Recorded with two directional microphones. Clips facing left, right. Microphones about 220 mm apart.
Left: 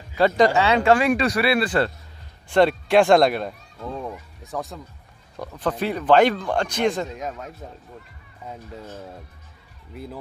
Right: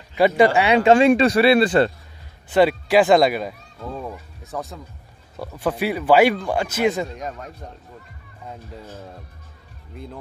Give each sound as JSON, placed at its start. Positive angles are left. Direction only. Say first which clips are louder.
{"t": 0.2, "sound": "speech", "louder": "right 2 dB", "side_deg": -15}
{"t": 2.5, "sound": "speech", "louder": "right 1 dB", "side_deg": -5}